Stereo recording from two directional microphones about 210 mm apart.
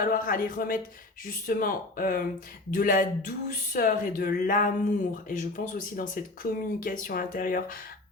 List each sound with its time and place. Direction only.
0.0 s speech: 40° left (ahead or behind)